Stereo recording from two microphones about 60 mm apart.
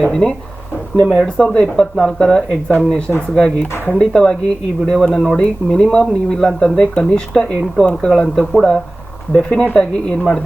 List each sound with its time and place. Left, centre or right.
0.0 s speech: centre
1.0 s speech: centre
1.4 s speech: centre